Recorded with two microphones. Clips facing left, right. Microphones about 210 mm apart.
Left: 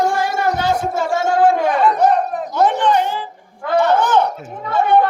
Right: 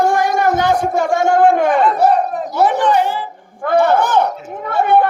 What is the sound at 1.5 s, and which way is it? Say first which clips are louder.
Chatter: right 3 dB; 50° right (ahead or behind).